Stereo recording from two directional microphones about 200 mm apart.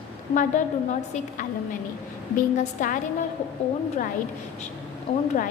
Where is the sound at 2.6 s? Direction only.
40° left (ahead or behind).